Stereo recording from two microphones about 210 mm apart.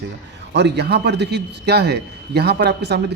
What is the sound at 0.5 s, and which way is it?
A man's voice, 55° right (ahead or behind).